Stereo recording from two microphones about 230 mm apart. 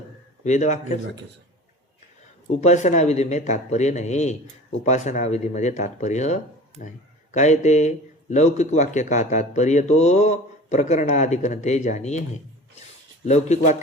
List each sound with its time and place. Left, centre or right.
0.4 s speech: left
2.5 s speech: left
13.2 s speech: left